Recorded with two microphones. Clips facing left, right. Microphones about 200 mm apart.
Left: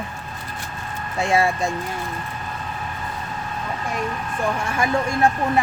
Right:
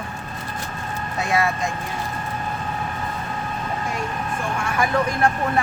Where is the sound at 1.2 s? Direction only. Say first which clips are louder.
Left 3 dB; 25° left (ahead or behind).